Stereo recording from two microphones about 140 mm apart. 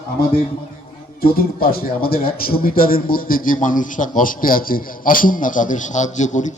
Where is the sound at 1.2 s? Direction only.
90° left.